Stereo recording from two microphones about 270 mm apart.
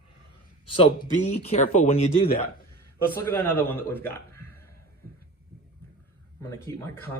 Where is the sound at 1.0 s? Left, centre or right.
Left.